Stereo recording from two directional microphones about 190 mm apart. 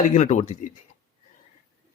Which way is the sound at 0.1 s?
40° left (ahead or behind).